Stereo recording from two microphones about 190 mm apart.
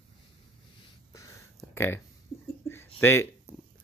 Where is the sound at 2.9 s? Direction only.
10° left (ahead or behind).